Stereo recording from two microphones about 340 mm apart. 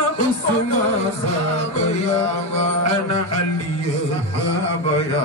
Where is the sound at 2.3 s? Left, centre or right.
Centre.